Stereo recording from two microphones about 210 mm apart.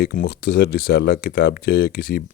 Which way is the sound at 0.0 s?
50° left (ahead or behind).